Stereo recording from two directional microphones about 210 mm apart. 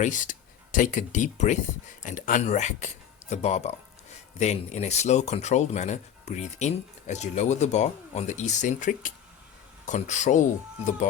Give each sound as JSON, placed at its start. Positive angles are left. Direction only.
{"t": 0.0, "sound": "speech", "side_deg": 35}